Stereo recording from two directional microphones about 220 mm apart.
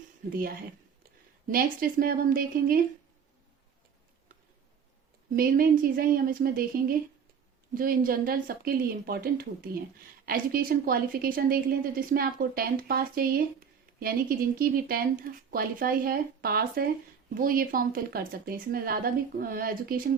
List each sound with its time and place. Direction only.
1.5 s a woman's voice: 40° right (ahead or behind)
5.4 s a woman's voice: 40° right (ahead or behind)